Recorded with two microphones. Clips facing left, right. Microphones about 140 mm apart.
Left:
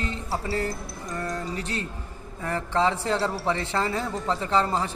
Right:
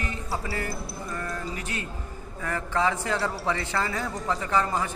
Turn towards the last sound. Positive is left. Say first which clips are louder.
# left 2 dB
turn(degrees=30)  # may be behind; listen again after turning